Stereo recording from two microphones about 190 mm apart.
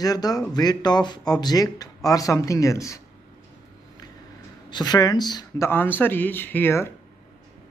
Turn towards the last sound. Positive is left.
turn(degrees=10)  # may be behind; listen again after turning